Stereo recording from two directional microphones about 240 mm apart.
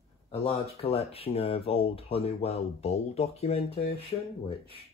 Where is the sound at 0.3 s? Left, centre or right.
Left.